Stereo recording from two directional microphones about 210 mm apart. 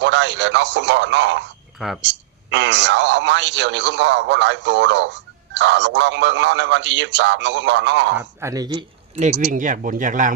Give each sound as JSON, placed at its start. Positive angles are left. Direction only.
{"t": 0.0, "sound": "a man's voice", "side_deg": -60}
{"t": 8.2, "sound": "speech", "side_deg": -15}
{"t": 9.4, "sound": "speech", "side_deg": -40}